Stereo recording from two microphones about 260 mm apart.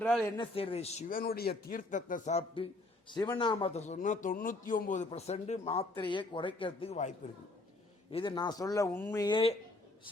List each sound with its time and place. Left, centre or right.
0.0 s a man's voice: centre
0.3 s speech: left